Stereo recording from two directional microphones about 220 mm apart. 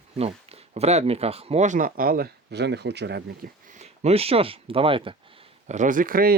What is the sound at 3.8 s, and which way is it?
Speech, 30° right (ahead or behind).